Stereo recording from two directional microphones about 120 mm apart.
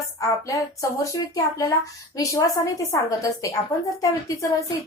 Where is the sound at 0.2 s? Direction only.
25° left (ahead or behind).